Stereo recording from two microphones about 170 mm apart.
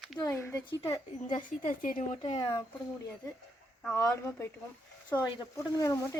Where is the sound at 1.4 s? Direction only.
55° left (ahead or behind).